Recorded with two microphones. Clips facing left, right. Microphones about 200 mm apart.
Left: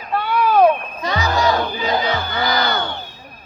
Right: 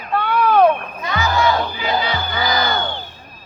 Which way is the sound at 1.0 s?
35° left (ahead or behind).